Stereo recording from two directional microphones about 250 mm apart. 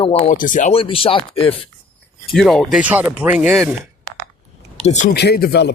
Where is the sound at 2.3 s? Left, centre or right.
Centre.